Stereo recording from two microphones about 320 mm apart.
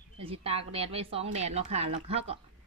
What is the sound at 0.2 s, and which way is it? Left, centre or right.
A woman's voice, centre.